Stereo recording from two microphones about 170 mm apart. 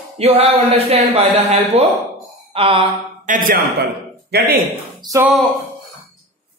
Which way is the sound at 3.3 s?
55° right (ahead or behind).